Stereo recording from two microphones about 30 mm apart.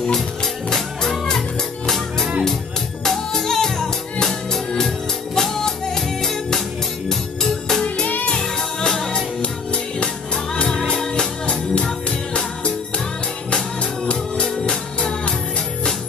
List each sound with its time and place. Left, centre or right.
0.7 s music: centre
3.4 s music: centre
7.1 s organ: centre
8.8 s music: centre
10.3 s music: left